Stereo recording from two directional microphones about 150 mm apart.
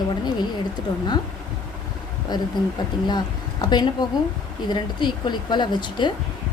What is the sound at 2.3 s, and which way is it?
Speech, 30° left (ahead or behind).